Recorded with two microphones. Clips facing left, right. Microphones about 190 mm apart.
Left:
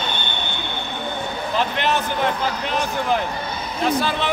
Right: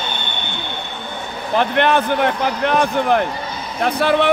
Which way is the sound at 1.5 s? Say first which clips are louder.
Right 7 dB; 55° right (ahead or behind).